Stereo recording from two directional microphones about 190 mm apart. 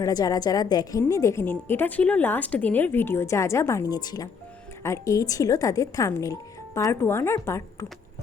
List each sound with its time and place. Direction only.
0.0 s a woman's voice: 20° left (ahead or behind)